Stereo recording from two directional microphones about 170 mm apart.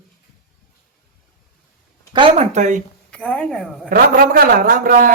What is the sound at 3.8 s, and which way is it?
A man's voice, 55° right (ahead or behind).